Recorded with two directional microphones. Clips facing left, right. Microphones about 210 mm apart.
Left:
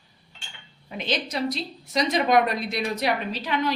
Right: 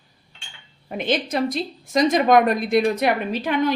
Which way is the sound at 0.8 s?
50° right (ahead or behind).